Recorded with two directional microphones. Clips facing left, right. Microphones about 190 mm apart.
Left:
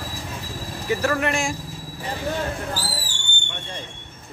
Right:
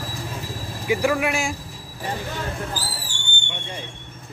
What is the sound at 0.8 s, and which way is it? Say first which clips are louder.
Speech: right 2 dB; 10° right (ahead or behind).